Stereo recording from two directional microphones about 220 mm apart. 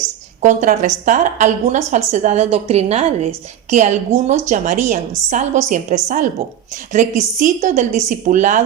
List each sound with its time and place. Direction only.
0.4 s a woman's voice: 35° right (ahead or behind)